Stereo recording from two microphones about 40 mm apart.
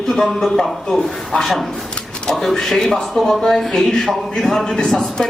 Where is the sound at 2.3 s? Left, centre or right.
Centre.